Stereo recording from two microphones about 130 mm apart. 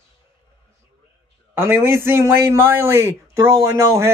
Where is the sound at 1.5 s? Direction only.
20° right (ahead or behind).